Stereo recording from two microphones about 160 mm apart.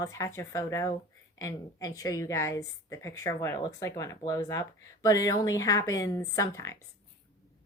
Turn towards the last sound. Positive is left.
turn(degrees=20)  # may be behind; listen again after turning